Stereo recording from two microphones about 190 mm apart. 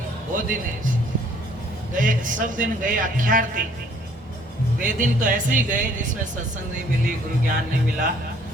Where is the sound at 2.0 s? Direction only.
45° right (ahead or behind).